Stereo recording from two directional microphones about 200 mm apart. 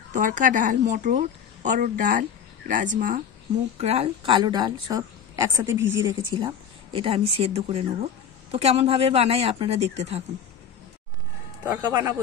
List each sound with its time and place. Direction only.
0.1 s a woman's voice: 40° right (ahead or behind); by 5.9 s 10° right (ahead or behind)
6.0 s speech: 25° right (ahead or behind)
11.6 s speech: 20° right (ahead or behind)